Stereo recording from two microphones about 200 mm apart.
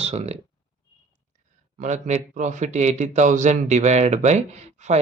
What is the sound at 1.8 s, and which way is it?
Speech, 35° right (ahead or behind).